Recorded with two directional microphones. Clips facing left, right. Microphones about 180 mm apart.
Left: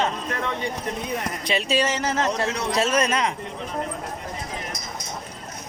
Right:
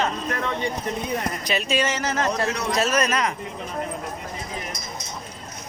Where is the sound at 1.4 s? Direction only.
30° left (ahead or behind).